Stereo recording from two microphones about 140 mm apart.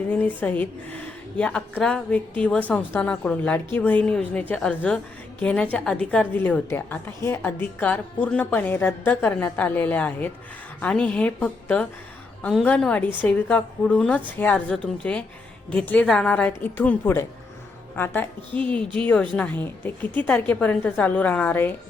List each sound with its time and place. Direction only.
0.1 s a woman's voice: 10° left (ahead or behind)